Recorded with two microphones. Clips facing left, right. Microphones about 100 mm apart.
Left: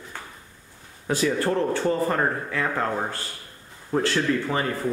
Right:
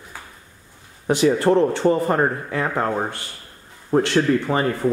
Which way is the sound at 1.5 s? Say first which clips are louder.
Right 6 dB; 25° right (ahead or behind).